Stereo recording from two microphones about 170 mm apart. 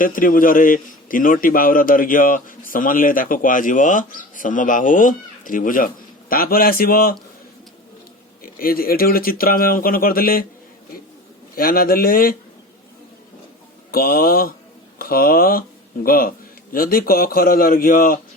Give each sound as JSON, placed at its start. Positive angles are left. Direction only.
{"t": 0.0, "sound": "a man's voice", "side_deg": 55}
{"t": 8.4, "sound": "speech", "side_deg": 60}
{"t": 11.5, "sound": "speech", "side_deg": 60}
{"t": 13.9, "sound": "speech", "side_deg": 60}